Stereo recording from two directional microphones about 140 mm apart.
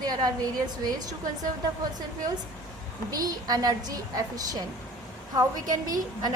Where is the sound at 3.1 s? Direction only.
25° right (ahead or behind).